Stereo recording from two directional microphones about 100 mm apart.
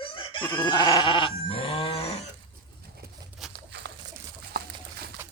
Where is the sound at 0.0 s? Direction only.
55° left (ahead or behind).